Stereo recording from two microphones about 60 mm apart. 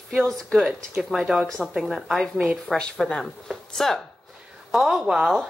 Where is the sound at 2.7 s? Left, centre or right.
Centre.